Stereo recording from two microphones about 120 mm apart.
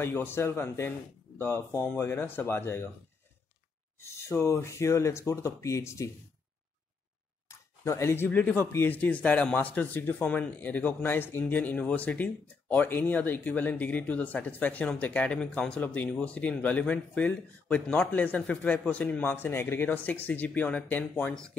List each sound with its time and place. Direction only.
0.0 s speech: 20° left (ahead or behind)
4.0 s speech: 20° left (ahead or behind)
7.4 s speech: 25° left (ahead or behind)